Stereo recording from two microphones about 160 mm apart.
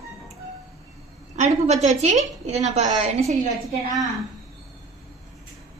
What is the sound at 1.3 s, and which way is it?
A woman's voice, 50° right (ahead or behind).